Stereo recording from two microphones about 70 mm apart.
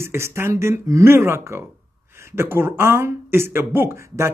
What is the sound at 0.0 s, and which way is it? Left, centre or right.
Speech, right.